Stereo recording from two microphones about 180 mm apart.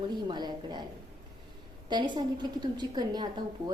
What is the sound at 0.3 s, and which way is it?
Speech, 25° right (ahead or behind).